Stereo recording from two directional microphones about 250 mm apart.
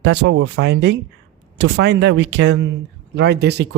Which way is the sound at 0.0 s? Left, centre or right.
Right.